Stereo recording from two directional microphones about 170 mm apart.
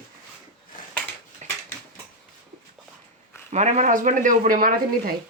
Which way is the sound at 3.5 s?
40° right (ahead or behind).